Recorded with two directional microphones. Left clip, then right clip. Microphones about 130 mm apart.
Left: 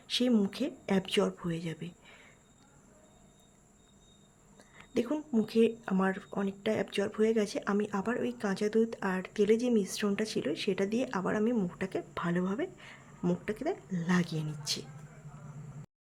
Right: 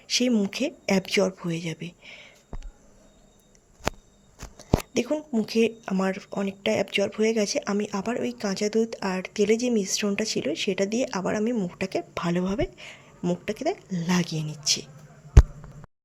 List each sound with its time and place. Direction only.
0.1 s speech: 20° right (ahead or behind)
4.5 s a sound: 20° right (ahead or behind)
5.1 s speech: 5° right (ahead or behind)
5.5 s speech: 15° right (ahead or behind)
11.7 s speech: 25° right (ahead or behind)